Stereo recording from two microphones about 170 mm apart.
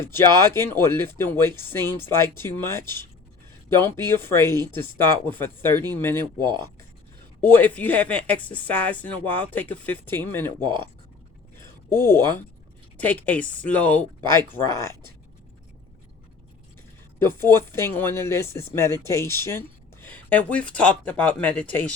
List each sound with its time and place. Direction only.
0.2 s speech: 15° left (ahead or behind)
5.7 s speech: 25° right (ahead or behind)
6.0 s speech: 15° left (ahead or behind)
7.4 s speech: 10° left (ahead or behind)
10.6 s speech: 25° right (ahead or behind)
11.9 s speech: 15° left (ahead or behind)
17.2 s speech: 15° left (ahead or behind)